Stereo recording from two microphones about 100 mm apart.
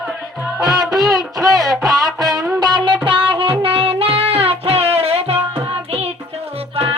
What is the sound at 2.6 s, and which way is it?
Music, 50° right (ahead or behind).